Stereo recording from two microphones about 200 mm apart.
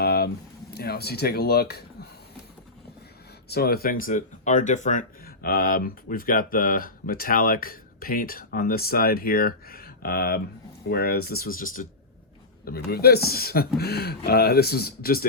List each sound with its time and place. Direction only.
0.0 s a sound: 50° left (ahead or behind)
0.7 s speech: 50° left (ahead or behind)
3.5 s speech: 50° left (ahead or behind)
4.0 s speech: 40° left (ahead or behind)